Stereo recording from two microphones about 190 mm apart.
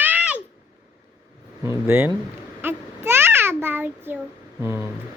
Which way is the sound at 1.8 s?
10° right (ahead or behind).